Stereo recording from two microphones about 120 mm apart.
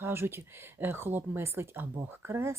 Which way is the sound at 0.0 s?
20° right (ahead or behind).